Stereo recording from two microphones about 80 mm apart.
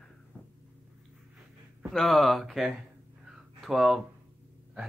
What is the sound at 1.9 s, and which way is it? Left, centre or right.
Speech, centre.